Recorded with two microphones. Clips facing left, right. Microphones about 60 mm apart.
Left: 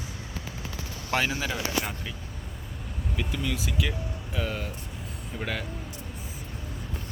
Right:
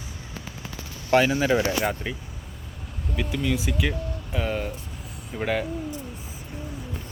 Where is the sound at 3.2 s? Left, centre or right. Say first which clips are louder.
Right 5 dB; centre.